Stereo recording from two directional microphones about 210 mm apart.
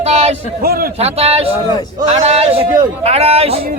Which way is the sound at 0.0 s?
30° right (ahead or behind).